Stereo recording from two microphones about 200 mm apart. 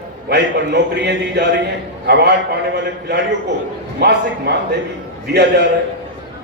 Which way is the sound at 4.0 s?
55° right (ahead or behind).